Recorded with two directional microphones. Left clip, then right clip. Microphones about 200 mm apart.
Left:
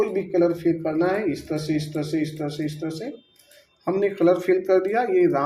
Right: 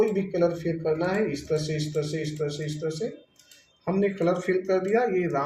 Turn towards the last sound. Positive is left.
turn(degrees=40)  # may be behind; listen again after turning